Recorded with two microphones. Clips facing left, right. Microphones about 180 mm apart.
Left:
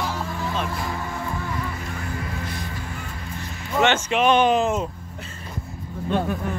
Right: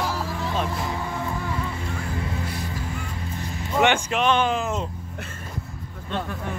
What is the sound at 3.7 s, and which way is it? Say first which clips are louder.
Speech: even; 10° right (ahead or behind).